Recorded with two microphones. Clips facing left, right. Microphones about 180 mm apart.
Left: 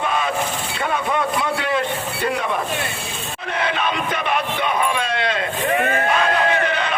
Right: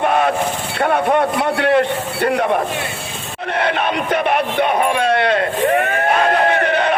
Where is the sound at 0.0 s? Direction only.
60° right (ahead or behind).